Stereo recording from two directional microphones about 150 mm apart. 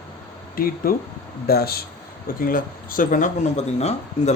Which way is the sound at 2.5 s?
70° left (ahead or behind).